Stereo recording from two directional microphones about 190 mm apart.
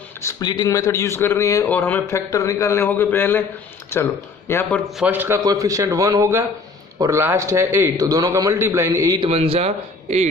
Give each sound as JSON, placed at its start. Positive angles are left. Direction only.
{"t": 0.2, "sound": "speech", "side_deg": 15}
{"t": 4.9, "sound": "a man's voice", "side_deg": -5}